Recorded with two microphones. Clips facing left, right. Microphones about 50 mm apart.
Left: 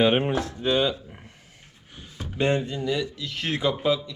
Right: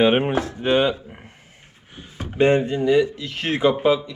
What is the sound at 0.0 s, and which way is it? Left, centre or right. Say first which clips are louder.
Speech: right 4 dB; centre.